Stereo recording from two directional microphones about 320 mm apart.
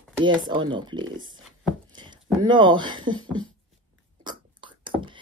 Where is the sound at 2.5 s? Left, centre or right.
Centre.